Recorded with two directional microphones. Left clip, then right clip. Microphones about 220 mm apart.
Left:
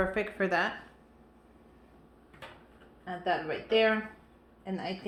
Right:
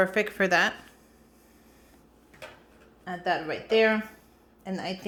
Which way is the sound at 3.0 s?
45° right (ahead or behind).